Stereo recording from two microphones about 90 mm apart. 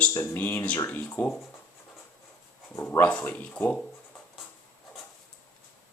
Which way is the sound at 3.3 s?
15° left (ahead or behind).